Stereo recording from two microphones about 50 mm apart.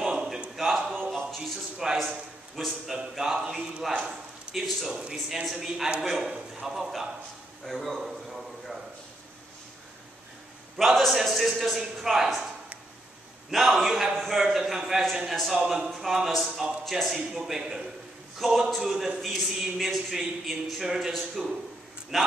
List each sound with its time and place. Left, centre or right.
0.0 s a sound: centre
2.5 s a man's voice: centre
4.0 s a sound: centre
4.8 s a man's voice: centre
5.1 s a man's voice: centre
10.8 s a man's voice: centre
13.5 s a man's voice: centre
15.5 s a man's voice: centre